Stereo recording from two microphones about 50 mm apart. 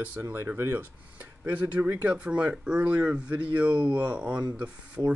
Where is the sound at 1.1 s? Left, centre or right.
Right.